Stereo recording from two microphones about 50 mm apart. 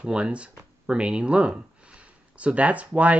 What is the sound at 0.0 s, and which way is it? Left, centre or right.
Speech, right.